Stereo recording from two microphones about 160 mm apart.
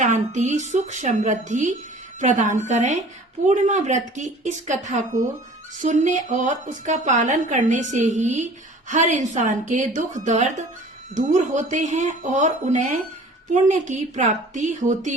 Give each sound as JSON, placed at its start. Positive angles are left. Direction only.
{"t": 0.0, "sound": "a woman's voice", "side_deg": -50}